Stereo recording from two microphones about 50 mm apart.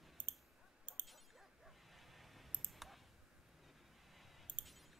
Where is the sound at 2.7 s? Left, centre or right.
Centre.